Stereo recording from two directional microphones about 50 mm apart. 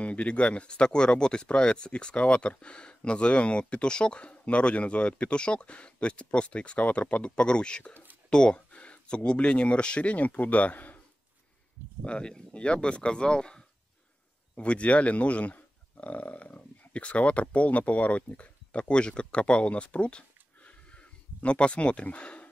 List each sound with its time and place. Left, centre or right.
0.0 s speech: left
12.0 s speech: left